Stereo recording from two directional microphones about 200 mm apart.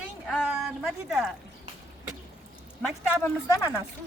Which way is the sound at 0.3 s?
Centre (ahead or behind).